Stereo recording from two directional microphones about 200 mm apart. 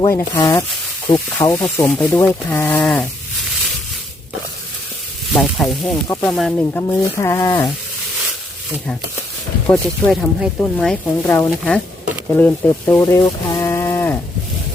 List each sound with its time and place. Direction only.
0.1 s speech: 15° left (ahead or behind)
5.3 s speech: centre (ahead or behind)
6.1 s speech: 15° left (ahead or behind)
6.3 s speech: centre (ahead or behind)
6.8 s speech: 15° left (ahead or behind)
9.6 s speech: centre (ahead or behind)